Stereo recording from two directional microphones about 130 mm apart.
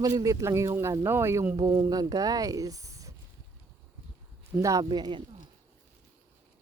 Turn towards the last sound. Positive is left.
turn(degrees=-35)  # may be behind; listen again after turning